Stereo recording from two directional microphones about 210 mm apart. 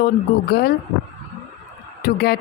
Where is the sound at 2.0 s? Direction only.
45° left (ahead or behind).